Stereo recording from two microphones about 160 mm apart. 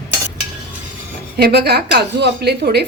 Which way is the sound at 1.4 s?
90° right.